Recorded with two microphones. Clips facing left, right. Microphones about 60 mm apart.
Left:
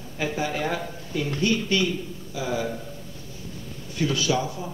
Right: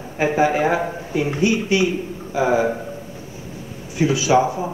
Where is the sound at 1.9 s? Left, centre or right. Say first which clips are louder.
Right 10 dB; right.